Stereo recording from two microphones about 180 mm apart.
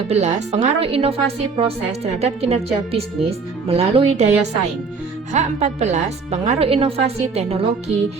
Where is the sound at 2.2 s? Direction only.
35° right (ahead or behind).